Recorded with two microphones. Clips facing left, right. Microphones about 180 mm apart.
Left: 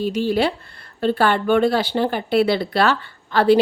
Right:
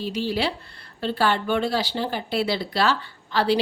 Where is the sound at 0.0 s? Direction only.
50° left (ahead or behind).